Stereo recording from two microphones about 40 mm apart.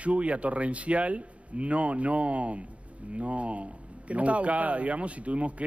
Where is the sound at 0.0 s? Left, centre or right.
Right.